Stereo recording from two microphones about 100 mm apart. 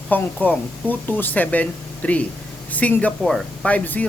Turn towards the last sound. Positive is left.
turn(degrees=15)  # may be behind; listen again after turning